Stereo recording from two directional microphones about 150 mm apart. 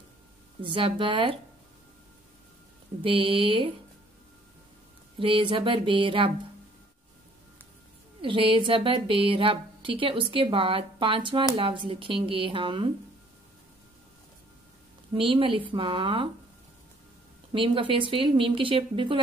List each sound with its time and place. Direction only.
0.6 s a woman's voice: 35° right (ahead or behind)
3.0 s a woman's voice: 35° right (ahead or behind)
5.2 s a woman's voice: 35° right (ahead or behind)
8.2 s a woman's voice: 35° right (ahead or behind)
15.1 s a woman's voice: 35° right (ahead or behind)
17.5 s a woman's voice: 35° right (ahead or behind)